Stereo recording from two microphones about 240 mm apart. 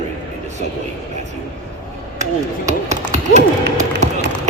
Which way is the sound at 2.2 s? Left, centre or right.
Right.